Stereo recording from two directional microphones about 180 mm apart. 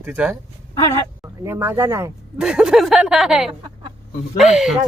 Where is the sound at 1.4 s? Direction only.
15° right (ahead or behind).